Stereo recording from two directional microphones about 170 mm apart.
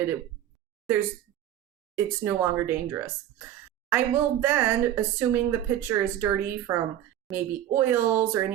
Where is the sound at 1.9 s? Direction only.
15° right (ahead or behind).